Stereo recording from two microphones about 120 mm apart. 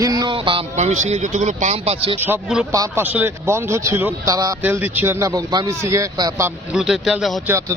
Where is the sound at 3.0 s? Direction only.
15° right (ahead or behind).